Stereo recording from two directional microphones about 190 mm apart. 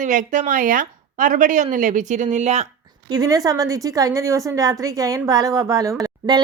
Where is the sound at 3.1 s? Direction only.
20° right (ahead or behind).